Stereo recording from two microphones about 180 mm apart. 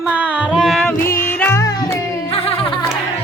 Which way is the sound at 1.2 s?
10° left (ahead or behind).